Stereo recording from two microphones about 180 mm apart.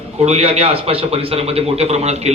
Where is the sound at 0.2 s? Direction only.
35° right (ahead or behind).